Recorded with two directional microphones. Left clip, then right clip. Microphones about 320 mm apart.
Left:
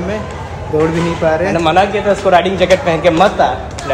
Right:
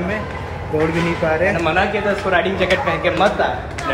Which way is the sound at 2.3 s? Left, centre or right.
Left.